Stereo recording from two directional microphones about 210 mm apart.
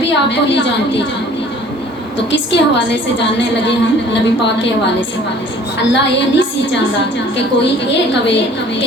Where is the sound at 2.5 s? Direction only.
60° left (ahead or behind).